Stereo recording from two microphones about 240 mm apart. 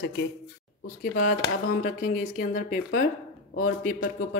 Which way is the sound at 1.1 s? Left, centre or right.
Left.